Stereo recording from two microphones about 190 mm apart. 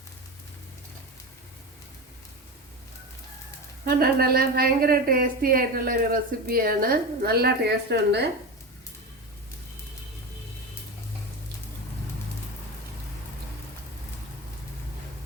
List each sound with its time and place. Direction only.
3.8 s a woman's voice: 50° right (ahead or behind)